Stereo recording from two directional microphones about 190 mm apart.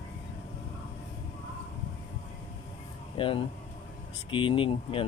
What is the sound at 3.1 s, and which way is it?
Speech, 25° left (ahead or behind).